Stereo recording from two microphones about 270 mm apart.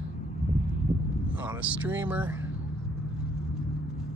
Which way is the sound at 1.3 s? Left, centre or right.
Centre.